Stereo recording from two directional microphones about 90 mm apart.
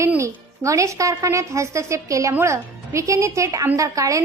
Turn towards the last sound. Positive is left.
turn(degrees=-40)  # may be behind; listen again after turning